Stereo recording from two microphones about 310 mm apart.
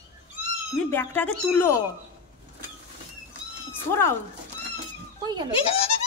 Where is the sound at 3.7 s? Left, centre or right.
Centre.